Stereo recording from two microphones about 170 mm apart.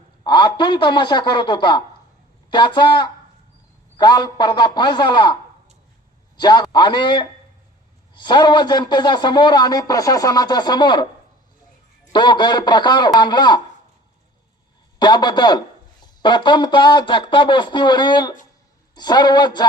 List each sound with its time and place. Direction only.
0.3 s a man's voice: 25° left (ahead or behind)
12.1 s a man's voice: 25° left (ahead or behind)
14.9 s a man's voice: 25° left (ahead or behind)